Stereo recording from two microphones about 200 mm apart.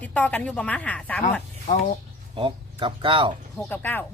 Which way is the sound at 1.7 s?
40° left (ahead or behind).